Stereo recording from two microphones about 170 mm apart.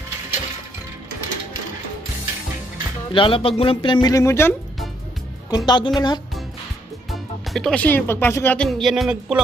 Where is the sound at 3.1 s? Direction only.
30° left (ahead or behind); by 4.5 s 15° left (ahead or behind).